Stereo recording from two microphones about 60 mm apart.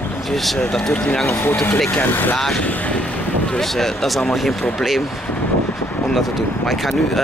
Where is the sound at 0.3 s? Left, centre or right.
Centre.